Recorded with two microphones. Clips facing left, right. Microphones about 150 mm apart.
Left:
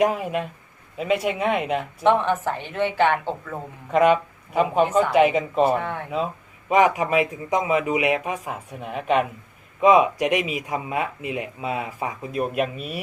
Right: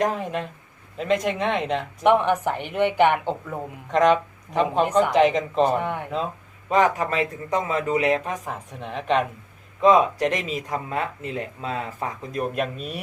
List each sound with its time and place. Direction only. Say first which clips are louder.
0.0 s speech: left 3 dB; 5° left (ahead or behind)
2.0 s a woman's voice: right 1 dB; 15° right (ahead or behind)
3.9 s speech: left 1 dB; 5° left (ahead or behind)
5.7 s a woman's voice: even; 15° right (ahead or behind)
6.7 s speech: left 2 dB; 10° left (ahead or behind)